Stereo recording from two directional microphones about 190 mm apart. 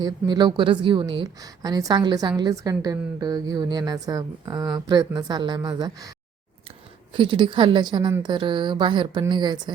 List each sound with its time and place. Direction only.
0.0 s a woman's voice: 20° right (ahead or behind)